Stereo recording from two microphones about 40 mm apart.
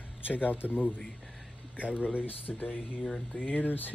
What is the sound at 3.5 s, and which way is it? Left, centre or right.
Speech, left.